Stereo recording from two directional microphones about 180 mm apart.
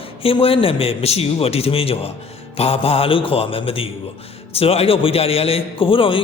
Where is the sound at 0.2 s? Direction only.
30° left (ahead or behind).